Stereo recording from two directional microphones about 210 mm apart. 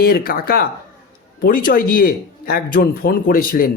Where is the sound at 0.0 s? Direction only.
45° left (ahead or behind).